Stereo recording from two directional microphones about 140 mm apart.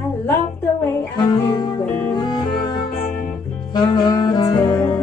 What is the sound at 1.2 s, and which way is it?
Music, 30° left (ahead or behind).